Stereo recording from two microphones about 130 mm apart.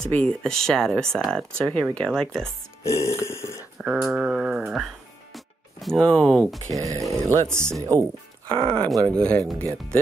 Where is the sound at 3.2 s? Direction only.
20° left (ahead or behind).